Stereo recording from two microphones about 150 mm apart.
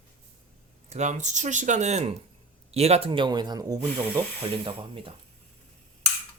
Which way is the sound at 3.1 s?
30° right (ahead or behind).